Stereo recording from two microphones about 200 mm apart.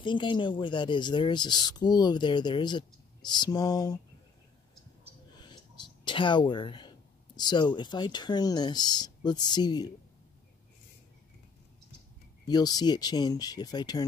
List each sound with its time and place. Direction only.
0.0 s speech: 25° left (ahead or behind)
5.3 s speech: 20° left (ahead or behind)
12.4 s speech: 20° left (ahead or behind)